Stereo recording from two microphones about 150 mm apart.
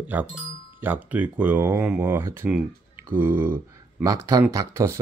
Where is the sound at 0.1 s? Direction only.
10° right (ahead or behind).